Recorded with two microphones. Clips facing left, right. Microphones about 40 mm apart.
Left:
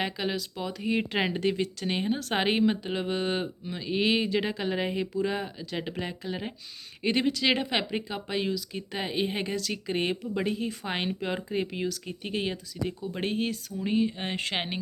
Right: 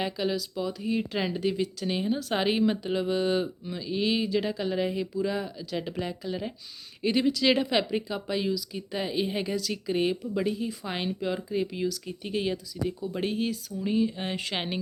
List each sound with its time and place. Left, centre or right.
0.0 s speech: left
2.6 s speech: left